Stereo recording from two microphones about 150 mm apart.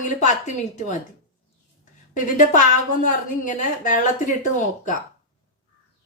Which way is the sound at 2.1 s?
55° left (ahead or behind).